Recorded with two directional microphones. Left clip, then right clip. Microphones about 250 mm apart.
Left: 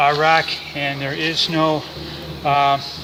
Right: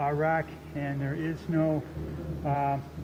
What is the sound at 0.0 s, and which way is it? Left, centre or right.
Speech, left.